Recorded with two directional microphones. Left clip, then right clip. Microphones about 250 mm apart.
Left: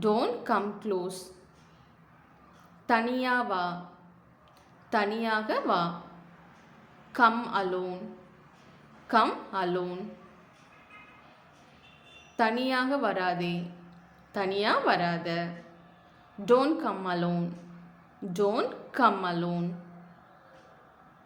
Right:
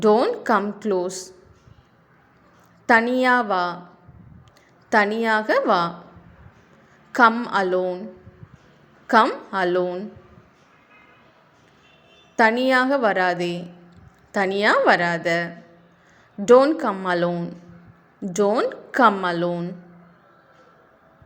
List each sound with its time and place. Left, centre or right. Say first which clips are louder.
0.0 s a woman's voice: right 10 dB; right
2.8 s a woman's voice: right 10 dB; right
4.9 s a woman's voice: right 9 dB; right
7.1 s a woman's voice: right 7 dB; right
9.0 s a woman's voice: right 8 dB; right
12.4 s a woman's voice: right 10 dB; right
16.5 s a woman's voice: right 10 dB; right